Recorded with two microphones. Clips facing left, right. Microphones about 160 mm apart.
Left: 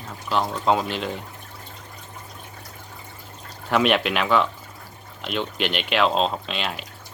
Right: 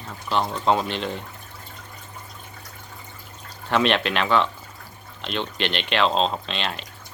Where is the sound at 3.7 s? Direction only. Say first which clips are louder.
Left 1 dB; 5° left (ahead or behind).